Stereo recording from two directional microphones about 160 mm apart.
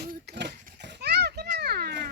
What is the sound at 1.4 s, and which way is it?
Children playing, 70° right (ahead or behind).